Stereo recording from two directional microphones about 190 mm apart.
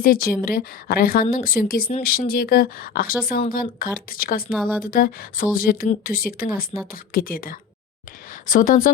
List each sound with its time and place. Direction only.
0.0 s speech: 50° left (ahead or behind)